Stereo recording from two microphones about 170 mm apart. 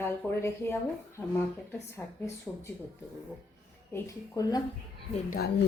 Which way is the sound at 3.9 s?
20° left (ahead or behind).